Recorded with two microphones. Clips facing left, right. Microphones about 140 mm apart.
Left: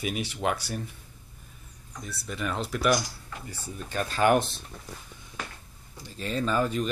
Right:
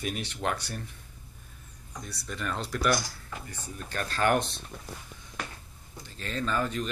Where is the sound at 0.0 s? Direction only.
5° left (ahead or behind).